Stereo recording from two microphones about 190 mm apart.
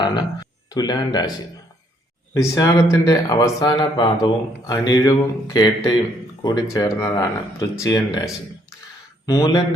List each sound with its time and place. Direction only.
0.0 s a sound: 20° left (ahead or behind)
0.7 s speech: 20° left (ahead or behind)
2.3 s speech: 15° left (ahead or behind)